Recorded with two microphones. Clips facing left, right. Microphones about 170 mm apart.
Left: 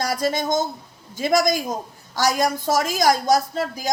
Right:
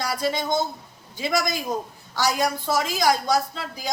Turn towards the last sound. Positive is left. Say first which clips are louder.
# left 5 dB
turn(degrees=45)  # may be behind; listen again after turning